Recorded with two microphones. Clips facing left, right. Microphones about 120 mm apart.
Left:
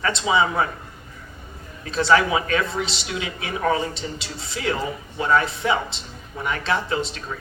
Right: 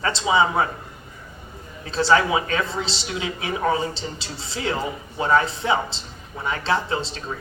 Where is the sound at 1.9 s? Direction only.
30° right (ahead or behind).